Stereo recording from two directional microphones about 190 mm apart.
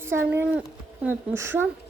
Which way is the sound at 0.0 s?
10° right (ahead or behind).